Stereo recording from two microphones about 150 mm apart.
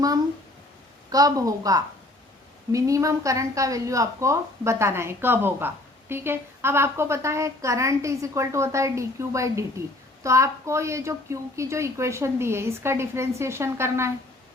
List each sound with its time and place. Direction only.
1.1 s a woman's voice: 25° right (ahead or behind)